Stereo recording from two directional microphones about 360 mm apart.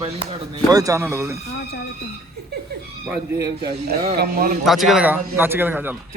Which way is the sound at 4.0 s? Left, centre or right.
Right.